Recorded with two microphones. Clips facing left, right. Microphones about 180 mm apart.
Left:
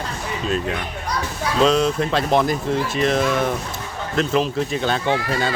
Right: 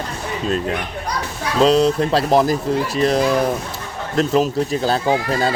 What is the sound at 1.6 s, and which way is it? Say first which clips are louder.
Speech: right 4 dB; 35° right (ahead or behind).